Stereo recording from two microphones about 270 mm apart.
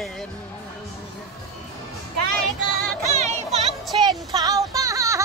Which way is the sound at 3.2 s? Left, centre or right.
Right.